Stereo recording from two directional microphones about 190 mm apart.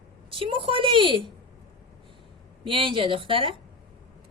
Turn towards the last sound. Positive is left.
turn(degrees=-25)  # may be behind; listen again after turning